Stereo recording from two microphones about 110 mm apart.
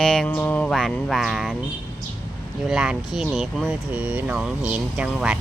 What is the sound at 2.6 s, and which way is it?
Speech, 5° right (ahead or behind).